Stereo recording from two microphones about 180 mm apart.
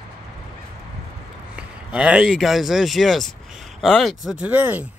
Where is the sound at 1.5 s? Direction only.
5° right (ahead or behind).